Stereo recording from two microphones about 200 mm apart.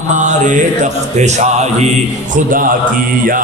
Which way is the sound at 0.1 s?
35° right (ahead or behind).